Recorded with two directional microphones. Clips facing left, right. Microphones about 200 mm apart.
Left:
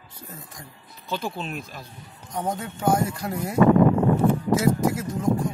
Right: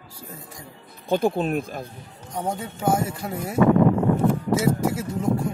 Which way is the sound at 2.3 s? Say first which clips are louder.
Even; 10° right (ahead or behind).